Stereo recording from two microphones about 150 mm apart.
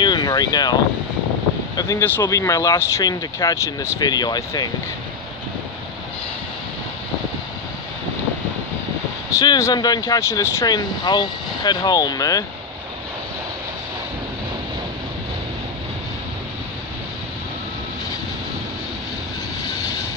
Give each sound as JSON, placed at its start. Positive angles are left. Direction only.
{"t": 0.0, "sound": "vehicle", "side_deg": 30}
{"t": 1.8, "sound": "speech", "side_deg": 25}
{"t": 9.4, "sound": "speech", "side_deg": 25}